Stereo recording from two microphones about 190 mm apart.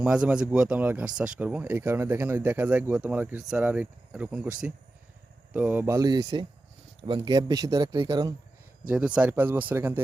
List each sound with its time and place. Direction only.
0.0 s speech: 5° right (ahead or behind)
5.5 s speech: 10° right (ahead or behind)
8.9 s speech: 5° right (ahead or behind)